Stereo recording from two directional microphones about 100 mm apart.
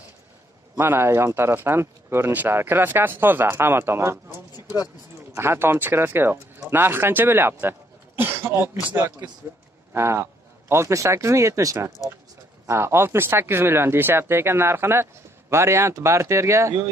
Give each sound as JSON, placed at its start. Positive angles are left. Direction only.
{"t": 0.7, "sound": "speech", "side_deg": -25}